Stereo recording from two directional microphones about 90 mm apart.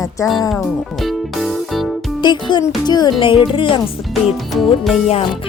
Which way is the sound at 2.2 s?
60° left (ahead or behind).